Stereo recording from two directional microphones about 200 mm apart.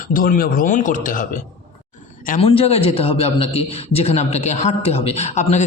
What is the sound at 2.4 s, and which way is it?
A man's voice, 30° left (ahead or behind).